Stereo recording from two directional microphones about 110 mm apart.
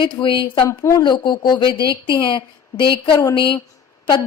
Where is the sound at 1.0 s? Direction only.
45° left (ahead or behind).